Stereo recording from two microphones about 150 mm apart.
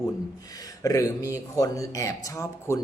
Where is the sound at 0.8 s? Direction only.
20° left (ahead or behind).